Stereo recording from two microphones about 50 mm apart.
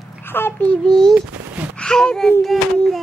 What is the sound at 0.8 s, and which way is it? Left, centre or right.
A child's voice, centre.